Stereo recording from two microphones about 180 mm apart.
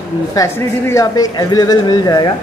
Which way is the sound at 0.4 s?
20° left (ahead or behind).